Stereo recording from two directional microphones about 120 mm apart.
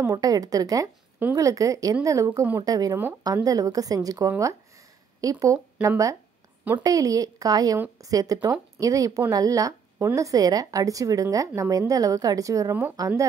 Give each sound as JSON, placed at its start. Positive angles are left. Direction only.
{"t": 0.0, "sound": "a woman's voice", "side_deg": -30}